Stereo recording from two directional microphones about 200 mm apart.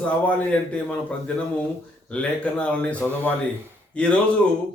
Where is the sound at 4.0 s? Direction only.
5° left (ahead or behind).